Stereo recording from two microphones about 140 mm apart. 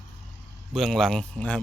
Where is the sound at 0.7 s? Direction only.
Centre (ahead or behind).